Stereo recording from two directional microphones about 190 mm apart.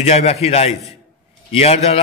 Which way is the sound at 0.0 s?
35° left (ahead or behind).